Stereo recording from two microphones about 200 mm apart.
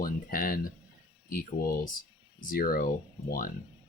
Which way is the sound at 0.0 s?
45° left (ahead or behind).